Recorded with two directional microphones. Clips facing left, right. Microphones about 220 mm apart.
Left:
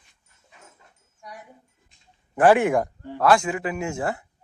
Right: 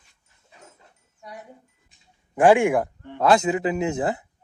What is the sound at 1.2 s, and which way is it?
Wind chime, 25° right (ahead or behind).